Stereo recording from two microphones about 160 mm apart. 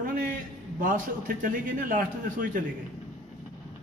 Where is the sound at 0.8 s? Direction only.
60° right (ahead or behind).